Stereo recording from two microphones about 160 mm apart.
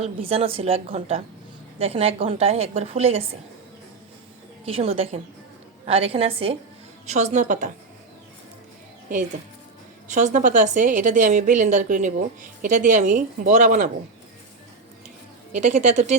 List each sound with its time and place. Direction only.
0.0 s a woman's voice: 40° right (ahead or behind)
4.6 s a woman's voice: 40° right (ahead or behind); by 7.7 s 55° right (ahead or behind)
10.1 s a woman's voice: 50° right (ahead or behind)
15.5 s a woman's voice: 50° right (ahead or behind)